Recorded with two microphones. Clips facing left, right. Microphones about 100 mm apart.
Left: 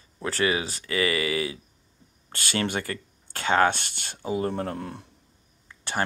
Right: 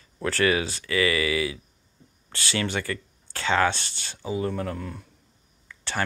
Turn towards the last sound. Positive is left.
turn(degrees=35)  # may be behind; listen again after turning